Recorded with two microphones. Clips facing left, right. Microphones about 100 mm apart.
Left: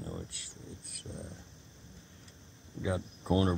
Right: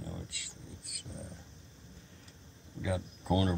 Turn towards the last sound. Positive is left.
turn(degrees=30)  # may be behind; listen again after turning